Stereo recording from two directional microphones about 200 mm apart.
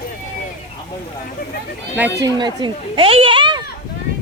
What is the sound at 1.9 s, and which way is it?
Speech, 10° right (ahead or behind).